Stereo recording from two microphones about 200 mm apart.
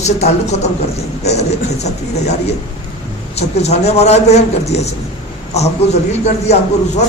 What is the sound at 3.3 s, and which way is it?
A man's voice, 35° left (ahead or behind).